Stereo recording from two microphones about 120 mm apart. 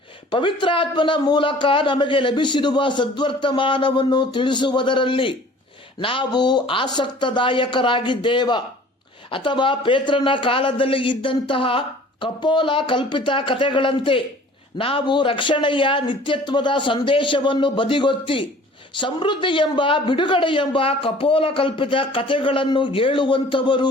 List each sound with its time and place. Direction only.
0.3 s a man's voice: 45° left (ahead or behind)